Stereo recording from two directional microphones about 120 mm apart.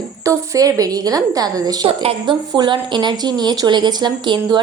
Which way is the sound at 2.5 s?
40° right (ahead or behind).